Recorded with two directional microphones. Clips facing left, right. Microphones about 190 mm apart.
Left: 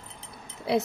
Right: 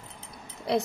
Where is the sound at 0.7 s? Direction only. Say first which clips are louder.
Left 1 dB; 5° left (ahead or behind).